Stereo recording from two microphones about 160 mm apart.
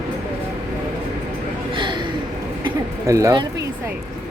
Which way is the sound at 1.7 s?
30° right (ahead or behind).